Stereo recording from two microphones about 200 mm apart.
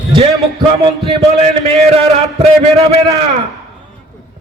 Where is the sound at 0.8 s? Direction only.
30° right (ahead or behind).